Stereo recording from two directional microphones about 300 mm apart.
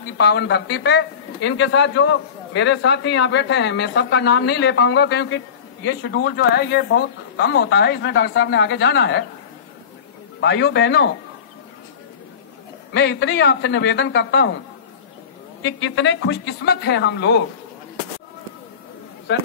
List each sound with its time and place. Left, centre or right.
0.2 s speech: left
10.4 s speech: left
12.9 s speech: left
15.6 s speech: left